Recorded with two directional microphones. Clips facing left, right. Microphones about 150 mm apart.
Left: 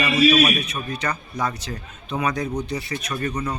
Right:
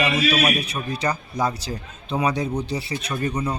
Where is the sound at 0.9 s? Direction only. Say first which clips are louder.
Right 4 dB; 30° right (ahead or behind).